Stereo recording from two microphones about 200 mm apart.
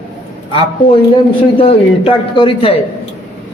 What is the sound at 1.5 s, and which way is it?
A man's voice, 25° left (ahead or behind).